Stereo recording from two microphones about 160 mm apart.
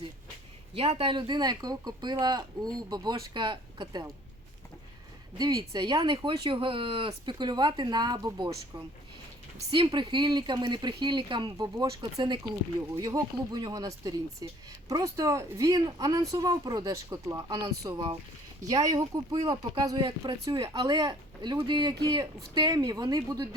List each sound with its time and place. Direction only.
0.7 s speech: 35° right (ahead or behind)
5.4 s speech: 25° right (ahead or behind)
9.7 s speech: 30° right (ahead or behind)